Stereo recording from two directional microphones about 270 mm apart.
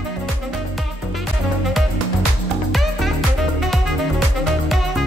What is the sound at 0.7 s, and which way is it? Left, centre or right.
Music, centre.